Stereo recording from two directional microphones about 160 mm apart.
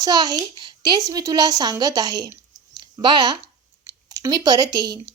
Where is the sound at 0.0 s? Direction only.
25° right (ahead or behind).